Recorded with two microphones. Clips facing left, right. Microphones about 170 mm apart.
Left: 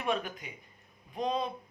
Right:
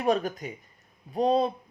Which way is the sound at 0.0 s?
40° right (ahead or behind).